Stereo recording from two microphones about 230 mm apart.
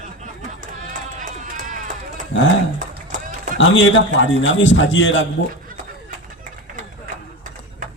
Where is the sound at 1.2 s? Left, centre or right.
Right.